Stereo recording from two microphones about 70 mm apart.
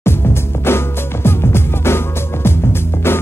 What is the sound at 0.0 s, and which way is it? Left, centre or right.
Music, left.